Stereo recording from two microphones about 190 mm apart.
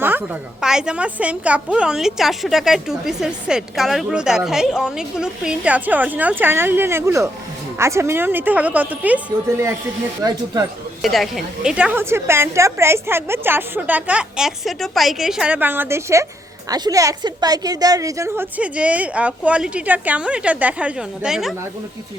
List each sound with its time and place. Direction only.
0.0 s a woman's voice: 10° right (ahead or behind)
11.0 s a woman's voice: centre (ahead or behind)